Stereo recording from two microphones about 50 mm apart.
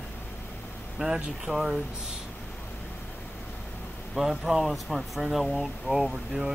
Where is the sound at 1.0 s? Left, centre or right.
Right.